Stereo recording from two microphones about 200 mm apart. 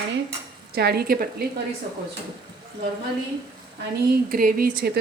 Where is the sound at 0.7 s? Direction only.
55° right (ahead or behind).